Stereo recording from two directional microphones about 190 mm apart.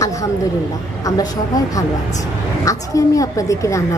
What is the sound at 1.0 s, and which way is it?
A woman's voice, 20° left (ahead or behind).